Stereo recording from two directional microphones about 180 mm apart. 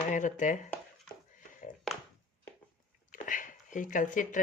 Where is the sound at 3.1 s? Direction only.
45° left (ahead or behind).